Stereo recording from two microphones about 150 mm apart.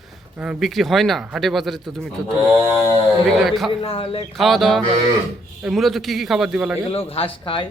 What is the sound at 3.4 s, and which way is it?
Speech, centre (ahead or behind).